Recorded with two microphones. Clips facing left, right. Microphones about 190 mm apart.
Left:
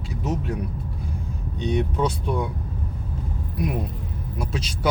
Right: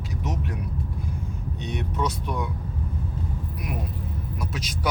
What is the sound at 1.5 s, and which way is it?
Speech, 30° left (ahead or behind).